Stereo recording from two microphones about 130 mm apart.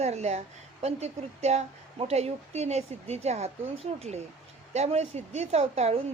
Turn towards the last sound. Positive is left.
turn(degrees=-55)  # may be behind; listen again after turning